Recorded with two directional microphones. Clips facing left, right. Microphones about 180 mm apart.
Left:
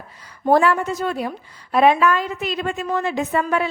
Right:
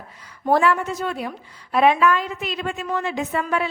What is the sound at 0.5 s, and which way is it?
A woman's voice, 40° left (ahead or behind).